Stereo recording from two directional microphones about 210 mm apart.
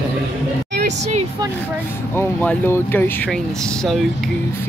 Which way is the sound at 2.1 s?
10° left (ahead or behind).